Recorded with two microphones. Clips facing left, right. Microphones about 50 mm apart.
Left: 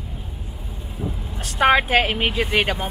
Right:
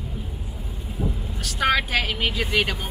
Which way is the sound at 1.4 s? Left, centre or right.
Left.